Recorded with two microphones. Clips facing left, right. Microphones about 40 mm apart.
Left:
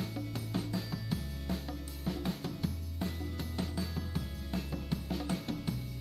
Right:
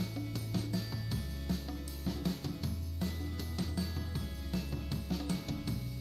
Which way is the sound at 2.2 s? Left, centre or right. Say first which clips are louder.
Left 1 dB; left.